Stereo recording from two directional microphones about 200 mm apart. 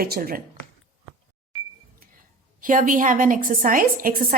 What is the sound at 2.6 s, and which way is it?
A woman's voice, 40° right (ahead or behind).